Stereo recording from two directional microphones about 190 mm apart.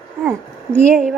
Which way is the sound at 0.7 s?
5° left (ahead or behind).